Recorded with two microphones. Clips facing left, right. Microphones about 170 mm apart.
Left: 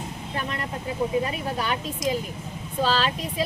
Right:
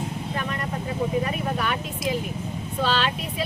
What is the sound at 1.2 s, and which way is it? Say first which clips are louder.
Speech: right 2 dB; 30° left (ahead or behind).